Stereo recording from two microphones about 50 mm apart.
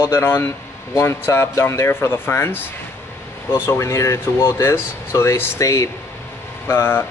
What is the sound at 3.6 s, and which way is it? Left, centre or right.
Speech, left.